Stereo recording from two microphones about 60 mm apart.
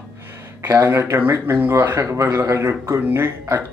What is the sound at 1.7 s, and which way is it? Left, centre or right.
Speech, right.